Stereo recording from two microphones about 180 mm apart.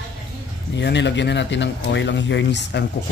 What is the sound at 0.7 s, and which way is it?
Speech, 75° left (ahead or behind).